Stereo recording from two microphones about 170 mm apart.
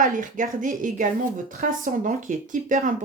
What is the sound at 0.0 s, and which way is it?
Speech, 50° right (ahead or behind).